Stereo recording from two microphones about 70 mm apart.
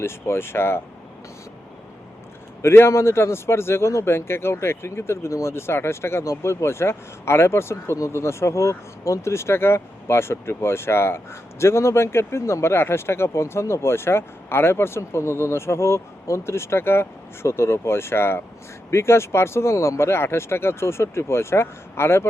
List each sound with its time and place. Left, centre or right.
0.0 s speech: left
2.6 s speech: left